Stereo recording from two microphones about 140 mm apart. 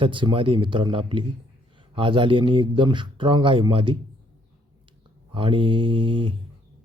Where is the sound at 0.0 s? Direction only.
35° right (ahead or behind).